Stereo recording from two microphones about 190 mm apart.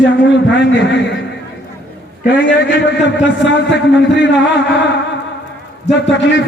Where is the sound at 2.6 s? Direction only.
65° left (ahead or behind).